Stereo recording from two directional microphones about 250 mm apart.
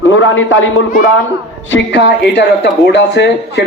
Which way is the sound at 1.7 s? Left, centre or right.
Left.